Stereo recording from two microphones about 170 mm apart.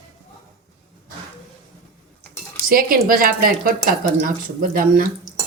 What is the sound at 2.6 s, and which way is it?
Speech, 60° right (ahead or behind).